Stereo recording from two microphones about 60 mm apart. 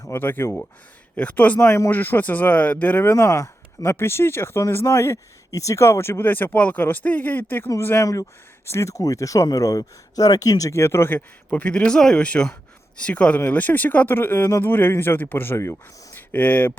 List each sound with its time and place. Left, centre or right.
0.2 s speech: left
3.2 s speech: left
3.9 s speech: left
5.5 s speech: left
7.9 s speech: left
10.7 s speech: left
11.1 s speech: left